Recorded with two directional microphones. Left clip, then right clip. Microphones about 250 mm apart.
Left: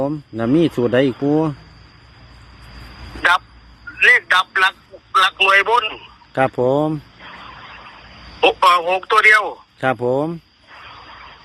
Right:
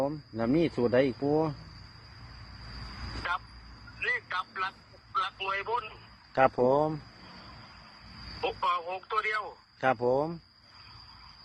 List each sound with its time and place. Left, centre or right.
0.0 s speech: left
4.0 s a sound: left
5.1 s speech: left
6.3 s speech: left
8.4 s speech: left
9.8 s speech: left